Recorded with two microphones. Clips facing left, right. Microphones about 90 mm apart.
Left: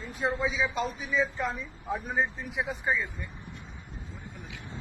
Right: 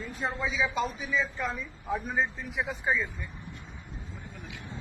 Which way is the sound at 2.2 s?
20° left (ahead or behind).